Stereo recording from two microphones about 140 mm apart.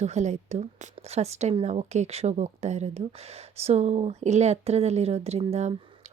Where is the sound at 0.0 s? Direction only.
55° right (ahead or behind).